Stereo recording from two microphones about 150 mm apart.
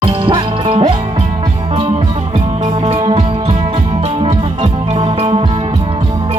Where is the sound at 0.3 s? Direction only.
40° right (ahead or behind).